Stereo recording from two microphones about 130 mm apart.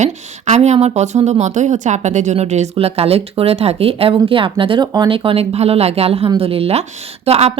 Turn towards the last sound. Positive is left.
turn(degrees=-55)  # may be behind; listen again after turning